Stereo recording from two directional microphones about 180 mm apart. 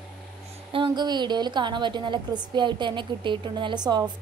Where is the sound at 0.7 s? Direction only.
25° right (ahead or behind).